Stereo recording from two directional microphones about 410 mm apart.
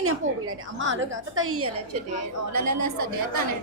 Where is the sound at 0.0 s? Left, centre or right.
Right.